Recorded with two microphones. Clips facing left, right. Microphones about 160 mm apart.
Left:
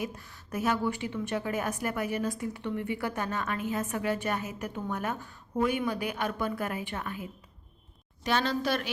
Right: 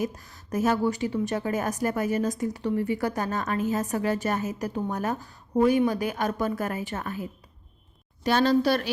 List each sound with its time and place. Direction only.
0.0 s a woman's voice: 40° right (ahead or behind)